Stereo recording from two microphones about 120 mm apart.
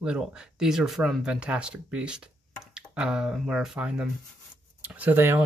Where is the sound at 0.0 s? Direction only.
5° right (ahead or behind).